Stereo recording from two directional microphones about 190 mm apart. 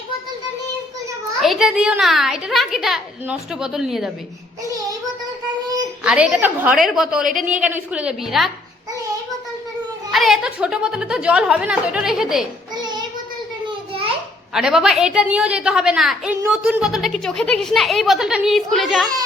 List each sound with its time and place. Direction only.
1.4 s a child's voice: centre (ahead or behind)
6.0 s a child's voice: 5° right (ahead or behind)
10.1 s a child's voice: centre (ahead or behind)
13.7 s a sound: 30° right (ahead or behind)
14.5 s a child's voice: centre (ahead or behind)